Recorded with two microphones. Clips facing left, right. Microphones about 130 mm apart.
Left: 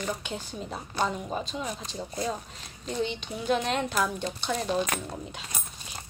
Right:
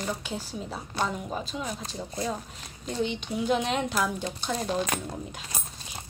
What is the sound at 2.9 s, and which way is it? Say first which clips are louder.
Speech: right 1 dB; 10° right (ahead or behind).